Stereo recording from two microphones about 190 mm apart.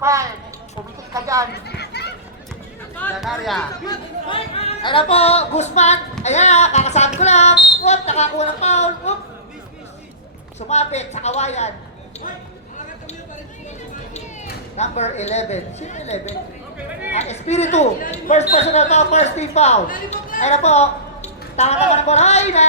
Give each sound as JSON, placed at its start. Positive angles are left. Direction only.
{"t": 0.0, "sound": "speech", "side_deg": -15}
{"t": 1.6, "sound": "chatter", "side_deg": 60}
{"t": 3.2, "sound": "speech", "side_deg": 0}
{"t": 3.8, "sound": "speech", "side_deg": 30}
{"t": 10.7, "sound": "speech", "side_deg": 35}
{"t": 14.8, "sound": "speech", "side_deg": 35}